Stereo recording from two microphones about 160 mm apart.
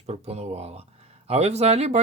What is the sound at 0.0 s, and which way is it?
Speech, 40° right (ahead or behind).